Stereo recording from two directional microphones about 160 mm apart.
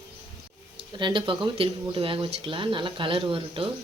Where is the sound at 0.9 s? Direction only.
30° right (ahead or behind).